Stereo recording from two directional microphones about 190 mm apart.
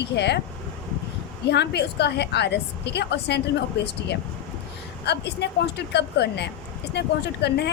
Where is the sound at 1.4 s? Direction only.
60° left (ahead or behind).